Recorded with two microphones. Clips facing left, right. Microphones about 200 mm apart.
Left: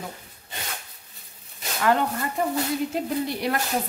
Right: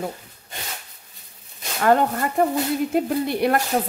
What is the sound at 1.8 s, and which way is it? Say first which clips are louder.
A woman's voice: right 4 dB; 45° right (ahead or behind).